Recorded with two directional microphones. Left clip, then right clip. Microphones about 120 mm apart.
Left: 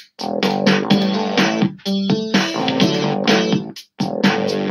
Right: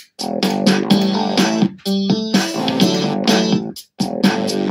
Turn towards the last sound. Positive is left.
turn(degrees=-45)  # may be behind; listen again after turning